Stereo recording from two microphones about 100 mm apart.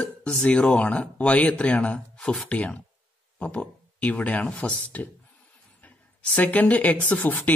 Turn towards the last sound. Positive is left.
turn(degrees=15)  # may be behind; listen again after turning